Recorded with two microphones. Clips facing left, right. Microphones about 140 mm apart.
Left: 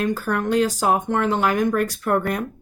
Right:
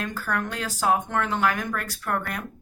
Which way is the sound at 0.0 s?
20° left (ahead or behind).